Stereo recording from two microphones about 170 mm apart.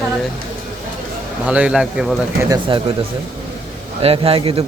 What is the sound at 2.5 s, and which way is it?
Speech, 30° right (ahead or behind).